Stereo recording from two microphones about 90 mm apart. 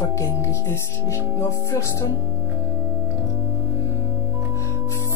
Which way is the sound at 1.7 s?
30° left (ahead or behind).